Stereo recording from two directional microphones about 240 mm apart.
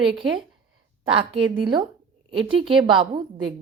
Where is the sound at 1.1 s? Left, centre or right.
Right.